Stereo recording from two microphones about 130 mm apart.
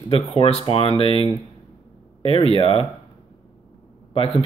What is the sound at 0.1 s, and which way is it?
Speech, 50° left (ahead or behind).